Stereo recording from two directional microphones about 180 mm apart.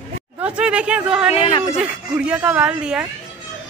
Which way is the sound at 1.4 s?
30° left (ahead or behind).